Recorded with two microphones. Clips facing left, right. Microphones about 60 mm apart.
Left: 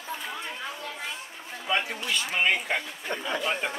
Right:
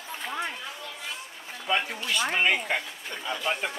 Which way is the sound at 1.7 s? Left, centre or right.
Centre.